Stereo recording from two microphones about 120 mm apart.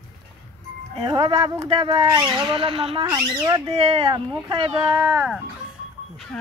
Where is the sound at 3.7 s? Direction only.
55° right (ahead or behind).